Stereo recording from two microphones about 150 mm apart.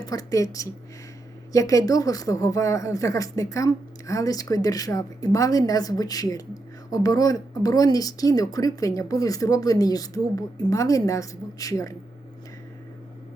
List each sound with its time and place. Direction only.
0.0 s speech: 25° left (ahead or behind)